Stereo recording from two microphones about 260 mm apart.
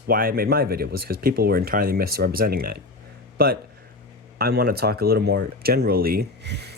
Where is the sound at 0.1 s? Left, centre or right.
Right.